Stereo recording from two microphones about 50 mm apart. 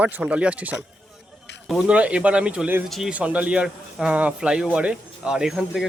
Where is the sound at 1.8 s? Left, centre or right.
Right.